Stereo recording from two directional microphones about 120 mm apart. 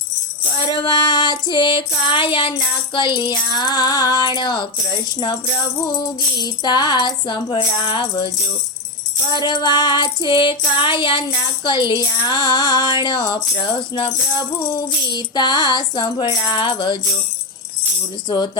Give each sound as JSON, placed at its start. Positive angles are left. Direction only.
{"t": 0.7, "sound": "music", "side_deg": 40}
{"t": 5.8, "sound": "music", "side_deg": 35}
{"t": 9.3, "sound": "music", "side_deg": 35}